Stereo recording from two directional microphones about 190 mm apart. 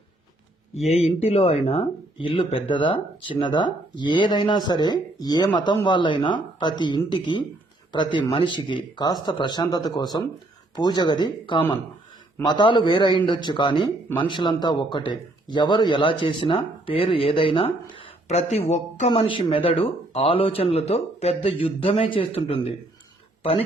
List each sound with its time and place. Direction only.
0.9 s a man's voice: 35° left (ahead or behind)